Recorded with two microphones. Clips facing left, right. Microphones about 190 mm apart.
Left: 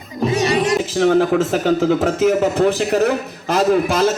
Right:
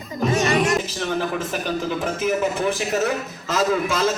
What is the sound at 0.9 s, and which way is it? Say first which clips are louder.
Speech: left 10 dB; 90° left.